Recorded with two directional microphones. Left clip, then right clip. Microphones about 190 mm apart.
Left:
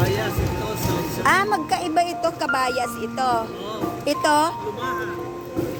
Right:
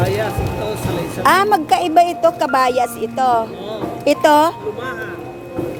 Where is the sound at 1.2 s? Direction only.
30° right (ahead or behind).